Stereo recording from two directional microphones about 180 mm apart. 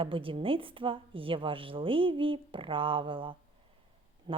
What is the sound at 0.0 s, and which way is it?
Speech, 30° right (ahead or behind).